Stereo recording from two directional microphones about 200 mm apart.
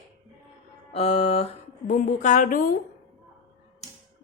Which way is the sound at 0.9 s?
30° left (ahead or behind).